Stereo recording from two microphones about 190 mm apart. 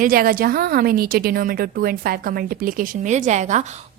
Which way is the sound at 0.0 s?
50° right (ahead or behind).